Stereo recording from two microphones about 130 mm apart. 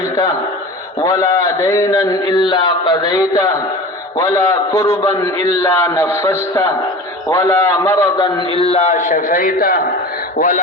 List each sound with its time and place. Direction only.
1.0 s a man's voice: 25° left (ahead or behind)
5.4 s a man's voice: 60° right (ahead or behind)
5.6 s a man's voice: 20° left (ahead or behind)
8.5 s speech: 55° left (ahead or behind); by 10.6 s 90° left